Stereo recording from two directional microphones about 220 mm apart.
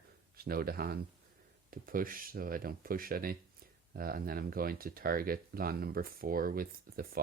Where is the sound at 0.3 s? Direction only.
40° right (ahead or behind).